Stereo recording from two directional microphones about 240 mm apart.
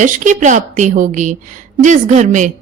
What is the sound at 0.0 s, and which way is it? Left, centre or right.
A woman's voice, right.